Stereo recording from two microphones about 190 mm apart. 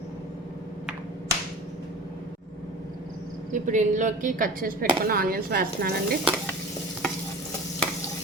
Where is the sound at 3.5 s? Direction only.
40° right (ahead or behind).